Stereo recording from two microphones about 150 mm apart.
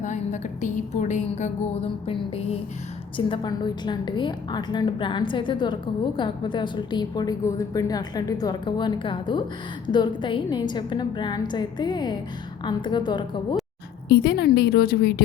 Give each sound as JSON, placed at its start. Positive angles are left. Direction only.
{"t": 0.0, "sound": "a woman's voice", "side_deg": 55}
{"t": 2.0, "sound": "a woman's voice", "side_deg": 40}
{"t": 14.1, "sound": "a woman's voice", "side_deg": 90}